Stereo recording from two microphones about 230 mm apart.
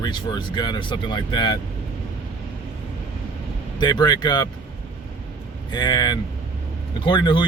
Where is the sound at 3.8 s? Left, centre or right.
Centre.